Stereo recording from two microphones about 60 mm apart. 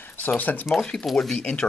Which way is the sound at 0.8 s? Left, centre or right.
Centre.